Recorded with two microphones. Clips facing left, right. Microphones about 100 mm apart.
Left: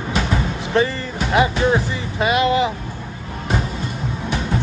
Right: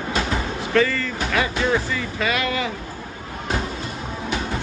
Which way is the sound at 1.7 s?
25° left (ahead or behind).